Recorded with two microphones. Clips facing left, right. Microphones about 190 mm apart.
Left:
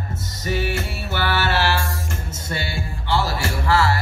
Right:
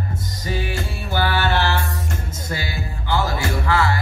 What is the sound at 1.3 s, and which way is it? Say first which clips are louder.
Music: left 1 dB; 75° left (ahead or behind).